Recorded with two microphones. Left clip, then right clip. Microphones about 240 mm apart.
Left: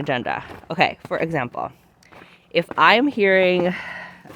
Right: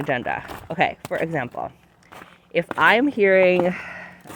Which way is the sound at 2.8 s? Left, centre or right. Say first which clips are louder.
Left 1 dB; left.